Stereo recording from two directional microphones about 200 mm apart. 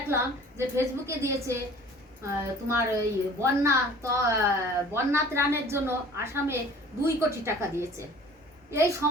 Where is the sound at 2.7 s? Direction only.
15° right (ahead or behind).